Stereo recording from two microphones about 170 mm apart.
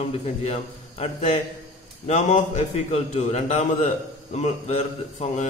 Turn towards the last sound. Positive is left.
turn(degrees=40)  # may be behind; listen again after turning